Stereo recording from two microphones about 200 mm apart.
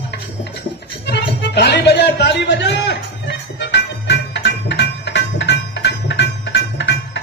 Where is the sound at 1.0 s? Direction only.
55° left (ahead or behind).